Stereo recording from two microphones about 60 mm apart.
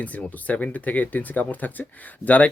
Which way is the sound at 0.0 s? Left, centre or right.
Left.